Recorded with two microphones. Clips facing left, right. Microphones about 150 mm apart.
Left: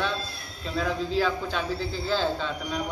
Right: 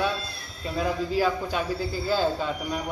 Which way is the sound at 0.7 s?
10° right (ahead or behind).